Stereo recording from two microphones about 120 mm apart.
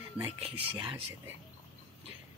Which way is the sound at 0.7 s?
40° right (ahead or behind).